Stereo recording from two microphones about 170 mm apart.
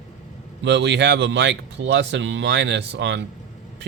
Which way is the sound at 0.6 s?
90° right.